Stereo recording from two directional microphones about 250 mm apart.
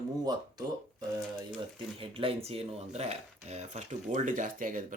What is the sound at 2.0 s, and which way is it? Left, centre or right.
Speech, right.